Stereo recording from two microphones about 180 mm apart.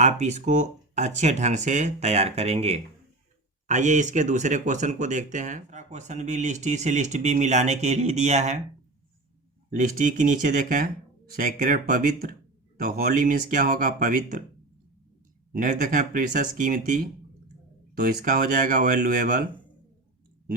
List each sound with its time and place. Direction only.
0.0 s speech: 40° right (ahead or behind)
9.6 s speech: 45° right (ahead or behind)
15.5 s speech: 45° right (ahead or behind)